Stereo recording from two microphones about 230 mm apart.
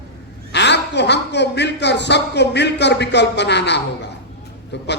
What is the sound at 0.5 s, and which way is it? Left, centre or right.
A man's voice, left.